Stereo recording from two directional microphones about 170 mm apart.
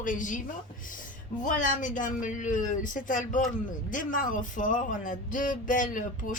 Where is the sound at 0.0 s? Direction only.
50° left (ahead or behind).